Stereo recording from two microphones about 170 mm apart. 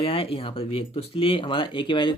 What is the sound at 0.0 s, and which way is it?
Speech, 35° left (ahead or behind).